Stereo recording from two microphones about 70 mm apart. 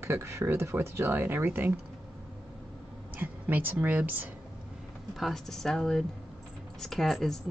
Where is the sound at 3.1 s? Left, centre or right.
Right.